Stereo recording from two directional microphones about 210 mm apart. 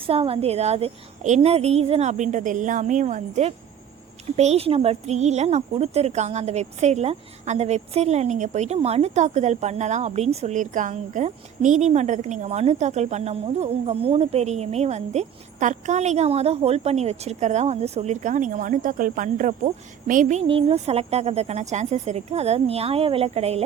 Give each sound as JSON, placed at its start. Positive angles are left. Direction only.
{"t": 0.0, "sound": "a woman's voice", "side_deg": -25}